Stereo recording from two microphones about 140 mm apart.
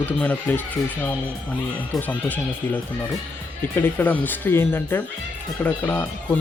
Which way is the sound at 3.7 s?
15° left (ahead or behind).